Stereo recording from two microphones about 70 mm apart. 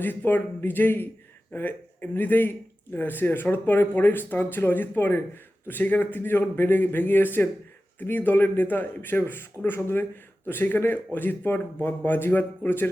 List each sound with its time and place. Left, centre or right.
0.0 s speech: left